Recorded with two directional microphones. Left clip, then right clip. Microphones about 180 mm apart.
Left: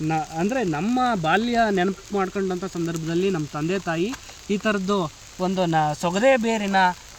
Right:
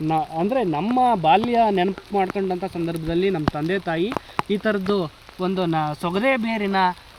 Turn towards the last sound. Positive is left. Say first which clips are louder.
# left 1 dB
turn(degrees=45)  # may be behind; listen again after turning